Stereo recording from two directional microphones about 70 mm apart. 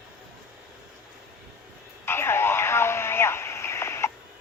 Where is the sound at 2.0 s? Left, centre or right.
Left.